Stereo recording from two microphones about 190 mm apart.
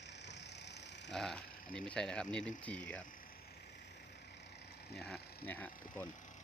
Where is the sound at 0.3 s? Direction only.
65° left (ahead or behind).